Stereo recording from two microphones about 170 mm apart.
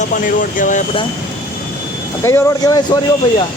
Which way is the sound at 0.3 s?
50° left (ahead or behind).